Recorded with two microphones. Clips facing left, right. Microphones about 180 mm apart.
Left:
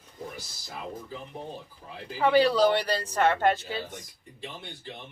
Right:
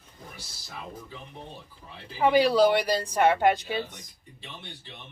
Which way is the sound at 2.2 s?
10° right (ahead or behind).